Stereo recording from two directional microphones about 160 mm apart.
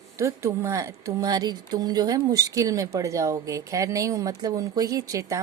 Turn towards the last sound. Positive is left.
turn(degrees=-20)  # may be behind; listen again after turning